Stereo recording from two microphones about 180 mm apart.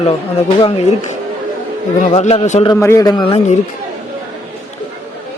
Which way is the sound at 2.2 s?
40° left (ahead or behind).